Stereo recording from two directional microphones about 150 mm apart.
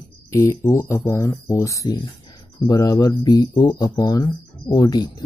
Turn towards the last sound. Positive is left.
turn(degrees=25)  # may be behind; listen again after turning